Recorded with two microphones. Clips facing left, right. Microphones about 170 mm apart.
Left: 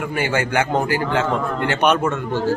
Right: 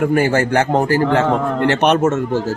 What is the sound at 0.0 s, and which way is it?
A man's voice, 45° right (ahead or behind).